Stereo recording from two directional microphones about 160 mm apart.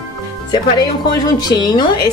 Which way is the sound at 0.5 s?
25° left (ahead or behind).